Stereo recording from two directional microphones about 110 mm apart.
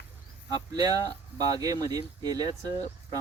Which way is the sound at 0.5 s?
35° right (ahead or behind).